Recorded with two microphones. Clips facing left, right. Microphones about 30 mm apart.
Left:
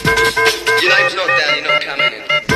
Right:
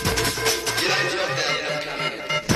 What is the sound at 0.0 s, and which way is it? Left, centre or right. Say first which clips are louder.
Music: left 11 dB; left.